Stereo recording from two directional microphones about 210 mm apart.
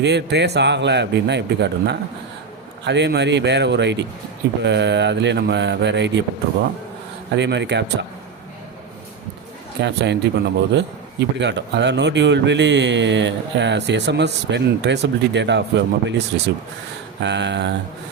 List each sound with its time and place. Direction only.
0.0 s a man's voice: 55° right (ahead or behind)
7.3 s a man's voice: 55° right (ahead or behind)
9.8 s a man's voice: 55° right (ahead or behind)